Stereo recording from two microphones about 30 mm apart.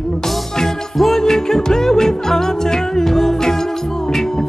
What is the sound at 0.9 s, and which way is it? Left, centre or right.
Music, centre.